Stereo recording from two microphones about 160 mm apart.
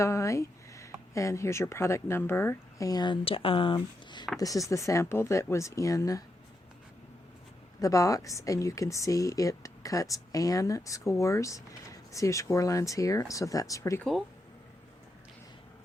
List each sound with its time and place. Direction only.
0.0 s speech: 20° left (ahead or behind)
7.8 s speech: 20° left (ahead or behind)
14.0 s speech: centre (ahead or behind)